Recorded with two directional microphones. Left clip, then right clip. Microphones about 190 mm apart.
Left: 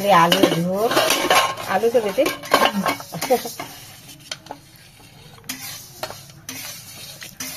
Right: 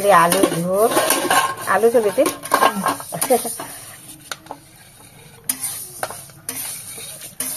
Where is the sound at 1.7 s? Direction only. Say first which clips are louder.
Right 6 dB; 10° right (ahead or behind).